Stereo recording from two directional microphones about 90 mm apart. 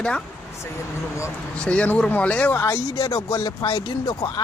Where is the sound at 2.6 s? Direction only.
35° left (ahead or behind).